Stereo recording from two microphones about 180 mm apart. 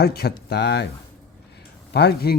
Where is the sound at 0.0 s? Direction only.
60° left (ahead or behind).